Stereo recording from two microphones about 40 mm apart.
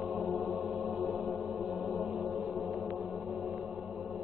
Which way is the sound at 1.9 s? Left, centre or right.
Centre.